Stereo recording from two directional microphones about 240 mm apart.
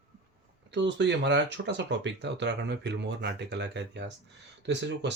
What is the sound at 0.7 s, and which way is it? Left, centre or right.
Speech, right.